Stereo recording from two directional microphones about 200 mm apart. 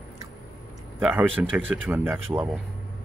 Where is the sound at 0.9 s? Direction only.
10° right (ahead or behind).